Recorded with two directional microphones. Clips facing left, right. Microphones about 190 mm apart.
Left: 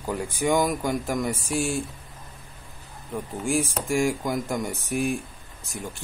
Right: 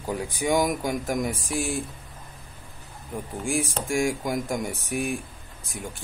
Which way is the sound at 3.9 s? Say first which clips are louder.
Left 1 dB; centre (ahead or behind).